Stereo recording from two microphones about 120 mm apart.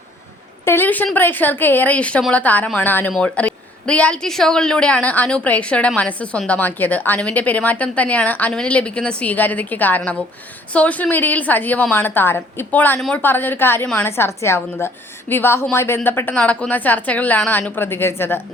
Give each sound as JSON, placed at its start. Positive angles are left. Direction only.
{"t": 0.6, "sound": "a woman's voice", "side_deg": 20}